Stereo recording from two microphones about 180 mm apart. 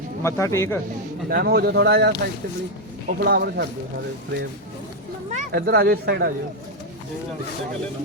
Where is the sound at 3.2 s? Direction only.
60° right (ahead or behind).